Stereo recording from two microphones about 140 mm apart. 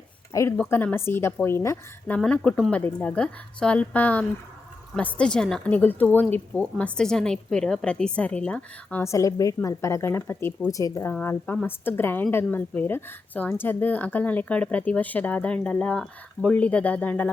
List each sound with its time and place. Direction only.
0.5 s a woman's voice: 10° left (ahead or behind)
2.1 s a woman's voice: 5° left (ahead or behind)